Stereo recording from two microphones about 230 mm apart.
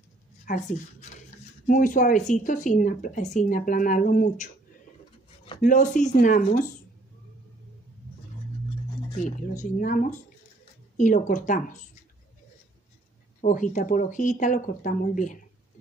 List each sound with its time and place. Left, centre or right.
0.5 s speech: left
9.2 s speech: left
13.4 s speech: left